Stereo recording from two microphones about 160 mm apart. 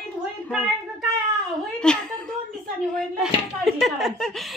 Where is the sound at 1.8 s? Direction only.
5° left (ahead or behind).